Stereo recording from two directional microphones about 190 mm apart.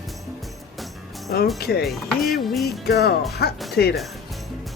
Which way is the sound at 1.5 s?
55° left (ahead or behind).